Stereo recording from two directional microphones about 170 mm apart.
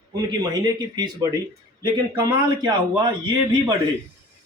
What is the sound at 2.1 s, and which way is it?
Speech, 25° right (ahead or behind).